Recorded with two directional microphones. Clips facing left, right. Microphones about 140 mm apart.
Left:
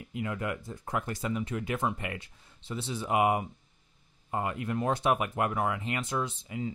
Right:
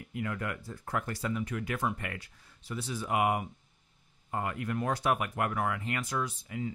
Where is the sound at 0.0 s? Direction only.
20° left (ahead or behind).